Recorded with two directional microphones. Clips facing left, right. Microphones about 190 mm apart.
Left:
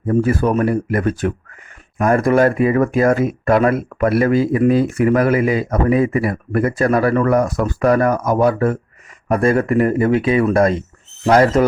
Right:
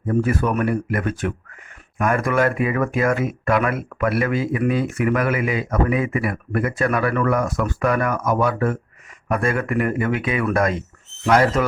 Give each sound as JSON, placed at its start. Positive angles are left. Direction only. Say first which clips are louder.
{"t": 0.1, "sound": "speech", "louder": "left 4 dB", "side_deg": 30}